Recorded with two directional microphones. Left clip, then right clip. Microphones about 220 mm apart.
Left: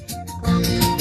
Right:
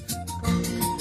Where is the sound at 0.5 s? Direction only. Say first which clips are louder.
Left 12 dB; 60° left (ahead or behind).